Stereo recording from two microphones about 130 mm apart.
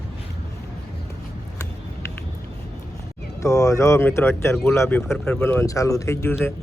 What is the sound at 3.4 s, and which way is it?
Speech, 25° left (ahead or behind).